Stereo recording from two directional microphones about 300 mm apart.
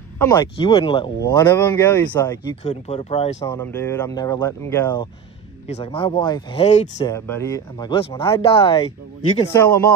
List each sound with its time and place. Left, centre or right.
0.2 s speech: centre
2.6 s speech: left
3.4 s speech: centre
5.7 s speech: centre